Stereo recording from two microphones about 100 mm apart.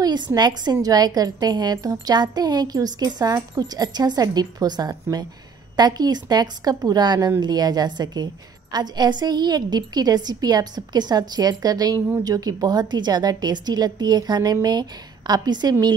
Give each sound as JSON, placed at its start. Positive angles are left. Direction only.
{"t": 0.0, "sound": "a woman's voice", "side_deg": -45}